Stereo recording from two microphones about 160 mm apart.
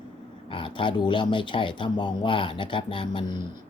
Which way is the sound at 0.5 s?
30° left (ahead or behind).